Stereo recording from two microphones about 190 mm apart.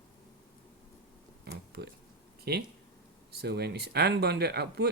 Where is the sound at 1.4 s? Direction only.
60° right (ahead or behind).